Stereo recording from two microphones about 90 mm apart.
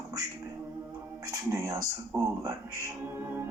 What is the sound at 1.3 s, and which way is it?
Speech, 35° right (ahead or behind).